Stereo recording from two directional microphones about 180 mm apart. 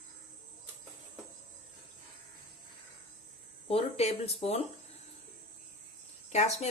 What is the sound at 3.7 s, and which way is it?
Speech, 35° left (ahead or behind).